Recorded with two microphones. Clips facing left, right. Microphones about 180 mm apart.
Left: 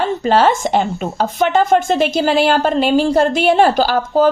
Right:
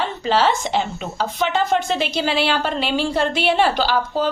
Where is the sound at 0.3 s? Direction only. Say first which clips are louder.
Left 5 dB; 50° left (ahead or behind).